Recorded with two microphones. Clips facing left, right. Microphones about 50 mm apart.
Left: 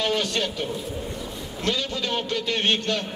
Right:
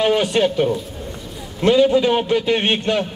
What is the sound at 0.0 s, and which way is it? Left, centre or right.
A man's voice, right.